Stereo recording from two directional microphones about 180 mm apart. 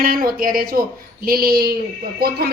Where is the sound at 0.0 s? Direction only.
50° right (ahead or behind).